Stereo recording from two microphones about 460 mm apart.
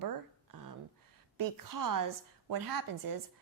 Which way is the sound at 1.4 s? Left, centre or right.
Right.